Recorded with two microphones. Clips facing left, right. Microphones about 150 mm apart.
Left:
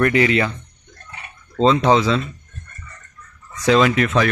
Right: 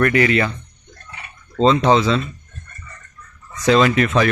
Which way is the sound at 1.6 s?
10° left (ahead or behind).